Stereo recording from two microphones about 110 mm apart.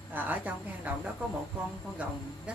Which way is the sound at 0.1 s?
15° right (ahead or behind).